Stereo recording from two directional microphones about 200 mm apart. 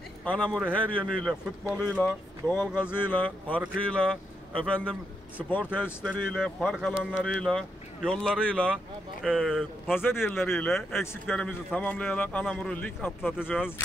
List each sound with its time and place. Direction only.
0.2 s speech: 5° left (ahead or behind)
6.9 s speech: 5° right (ahead or behind)